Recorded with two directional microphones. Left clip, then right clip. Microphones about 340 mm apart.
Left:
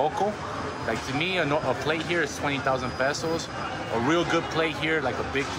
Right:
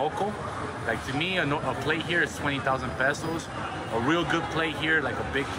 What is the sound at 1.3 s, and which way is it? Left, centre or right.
Speech, centre.